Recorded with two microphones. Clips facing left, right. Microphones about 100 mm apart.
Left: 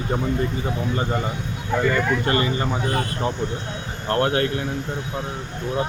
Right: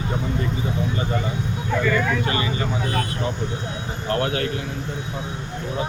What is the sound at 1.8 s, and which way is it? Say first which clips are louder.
Speech: left 1 dB; 40° left (ahead or behind).